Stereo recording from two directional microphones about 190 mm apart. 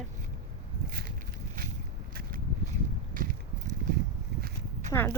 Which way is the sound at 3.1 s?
45° right (ahead or behind).